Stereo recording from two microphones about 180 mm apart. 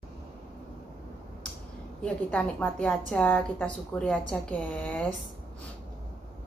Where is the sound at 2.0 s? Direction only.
5° left (ahead or behind).